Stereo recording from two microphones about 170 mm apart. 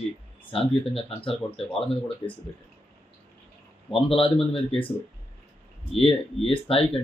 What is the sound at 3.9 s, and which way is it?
Speech, 30° left (ahead or behind).